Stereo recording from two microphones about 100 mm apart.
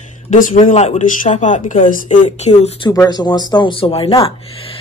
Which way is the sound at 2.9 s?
40° left (ahead or behind).